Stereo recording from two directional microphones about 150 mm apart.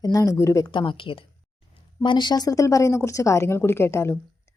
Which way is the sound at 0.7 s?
35° left (ahead or behind).